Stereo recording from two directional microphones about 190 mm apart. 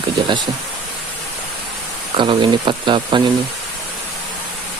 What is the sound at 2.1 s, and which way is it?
Speech, 25° right (ahead or behind).